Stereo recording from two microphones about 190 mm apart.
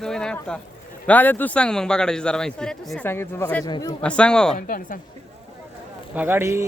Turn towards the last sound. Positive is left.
turn(degrees=-15)  # may be behind; listen again after turning